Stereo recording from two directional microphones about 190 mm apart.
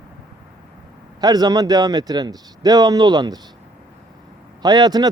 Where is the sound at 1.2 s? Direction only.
20° right (ahead or behind).